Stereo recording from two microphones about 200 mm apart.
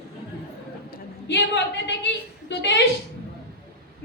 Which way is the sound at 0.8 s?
60° left (ahead or behind).